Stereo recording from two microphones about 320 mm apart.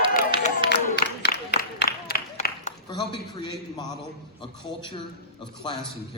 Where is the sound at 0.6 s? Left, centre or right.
Left; by 3.9 s centre.